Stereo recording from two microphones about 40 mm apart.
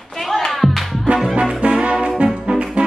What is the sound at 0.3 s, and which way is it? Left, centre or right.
Music, centre.